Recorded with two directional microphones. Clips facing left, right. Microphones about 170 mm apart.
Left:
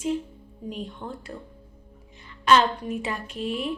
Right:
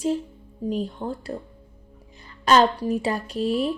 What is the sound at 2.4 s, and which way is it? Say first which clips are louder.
Speech: right 2 dB; 35° right (ahead or behind).